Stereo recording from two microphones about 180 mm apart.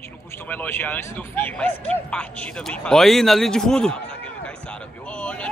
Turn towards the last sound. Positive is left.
turn(degrees=5)  # may be behind; listen again after turning